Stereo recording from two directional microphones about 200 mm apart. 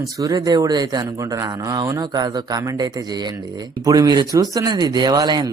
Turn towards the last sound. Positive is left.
turn(degrees=-20)  # may be behind; listen again after turning